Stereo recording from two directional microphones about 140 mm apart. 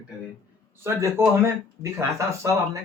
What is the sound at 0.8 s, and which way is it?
Speech, 20° right (ahead or behind).